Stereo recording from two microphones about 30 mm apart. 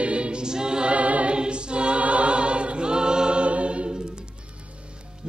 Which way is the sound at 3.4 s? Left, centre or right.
Right.